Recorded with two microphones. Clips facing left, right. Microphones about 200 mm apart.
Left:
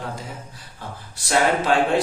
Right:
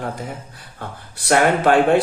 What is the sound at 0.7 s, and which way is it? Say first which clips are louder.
A man's voice: right 3 dB; 60° right (ahead or behind).